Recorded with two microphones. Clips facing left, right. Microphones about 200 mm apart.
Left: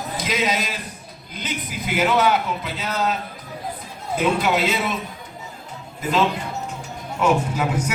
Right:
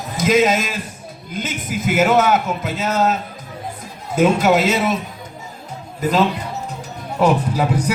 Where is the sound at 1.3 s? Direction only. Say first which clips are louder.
Right 5 dB; 45° right (ahead or behind).